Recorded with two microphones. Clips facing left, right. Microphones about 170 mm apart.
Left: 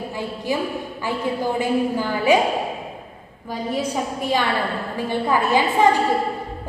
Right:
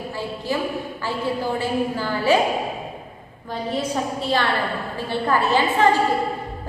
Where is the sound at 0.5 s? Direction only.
15° left (ahead or behind).